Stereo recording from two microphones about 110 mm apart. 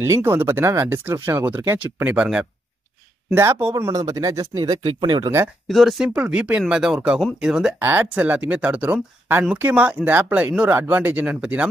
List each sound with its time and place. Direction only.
0.0 s speech: 20° right (ahead or behind)
2.1 s speech: 5° right (ahead or behind)
3.3 s speech: 20° right (ahead or behind)
3.9 s speech: 30° right (ahead or behind)
4.8 s speech: 45° right (ahead or behind)
5.7 s speech: centre (ahead or behind)
7.8 s speech: 15° right (ahead or behind)